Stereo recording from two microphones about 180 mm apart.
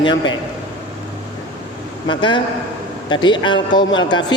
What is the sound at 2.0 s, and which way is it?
A man's voice, 25° left (ahead or behind).